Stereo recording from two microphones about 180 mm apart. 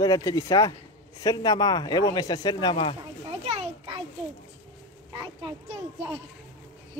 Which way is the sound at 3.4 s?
30° right (ahead or behind).